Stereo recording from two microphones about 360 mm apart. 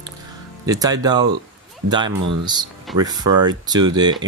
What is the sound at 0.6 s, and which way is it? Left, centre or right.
Speech, centre.